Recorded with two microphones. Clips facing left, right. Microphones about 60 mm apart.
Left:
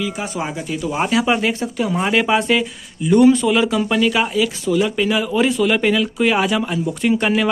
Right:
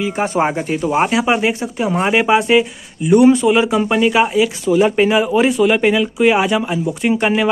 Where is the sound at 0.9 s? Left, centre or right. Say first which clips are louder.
Right 2 dB; right.